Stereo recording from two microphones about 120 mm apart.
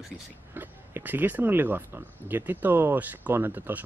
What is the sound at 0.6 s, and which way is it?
Speech, 15° right (ahead or behind).